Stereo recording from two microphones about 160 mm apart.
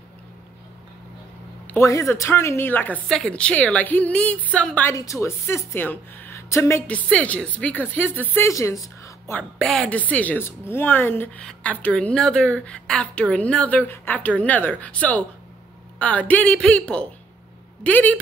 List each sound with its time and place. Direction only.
1.7 s a woman's voice: 15° left (ahead or behind)
4.9 s a woman's voice: 20° left (ahead or behind)
7.1 s a woman's voice: 5° left (ahead or behind)
9.4 s a woman's voice: 5° left (ahead or behind)